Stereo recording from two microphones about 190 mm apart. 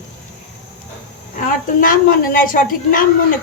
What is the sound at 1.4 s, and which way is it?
Speech, 45° left (ahead or behind).